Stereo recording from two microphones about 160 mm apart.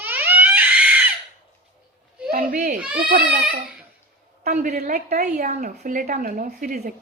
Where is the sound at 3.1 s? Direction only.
70° right (ahead or behind).